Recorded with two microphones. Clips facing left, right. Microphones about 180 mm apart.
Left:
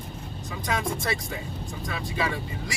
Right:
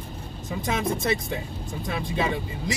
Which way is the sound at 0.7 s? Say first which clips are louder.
Right 3 dB; 20° right (ahead or behind).